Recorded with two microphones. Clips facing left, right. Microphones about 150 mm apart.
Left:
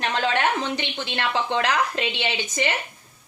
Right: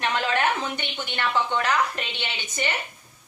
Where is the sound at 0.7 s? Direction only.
90° left.